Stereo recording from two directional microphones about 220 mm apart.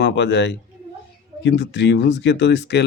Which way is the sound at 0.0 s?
50° left (ahead or behind).